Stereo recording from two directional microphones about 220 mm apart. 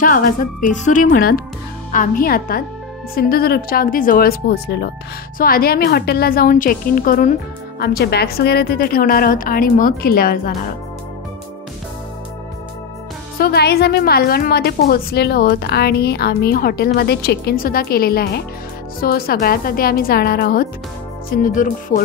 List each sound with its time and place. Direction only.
0.0 s a woman's voice: 40° left (ahead or behind)
13.4 s a woman's voice: 45° left (ahead or behind)